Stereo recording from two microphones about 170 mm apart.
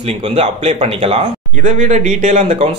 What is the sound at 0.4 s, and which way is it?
Speech, 40° right (ahead or behind).